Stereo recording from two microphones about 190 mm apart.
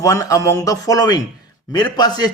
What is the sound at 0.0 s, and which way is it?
A man's voice, 15° left (ahead or behind).